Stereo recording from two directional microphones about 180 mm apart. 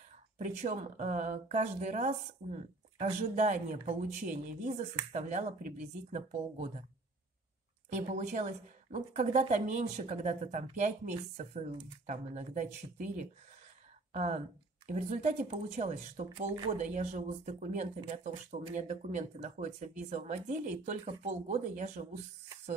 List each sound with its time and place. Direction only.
0.4 s a woman's voice: 40° right (ahead or behind)
7.9 s a woman's voice: 40° right (ahead or behind)
14.1 s a woman's voice: 40° right (ahead or behind)
16.3 s speech: 25° right (ahead or behind)
16.7 s a woman's voice: 40° right (ahead or behind)